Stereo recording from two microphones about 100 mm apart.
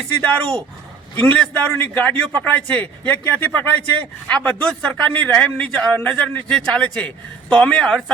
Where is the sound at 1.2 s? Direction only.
15° left (ahead or behind).